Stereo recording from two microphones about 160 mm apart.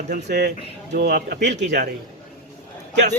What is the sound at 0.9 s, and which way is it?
Speech, 70° right (ahead or behind).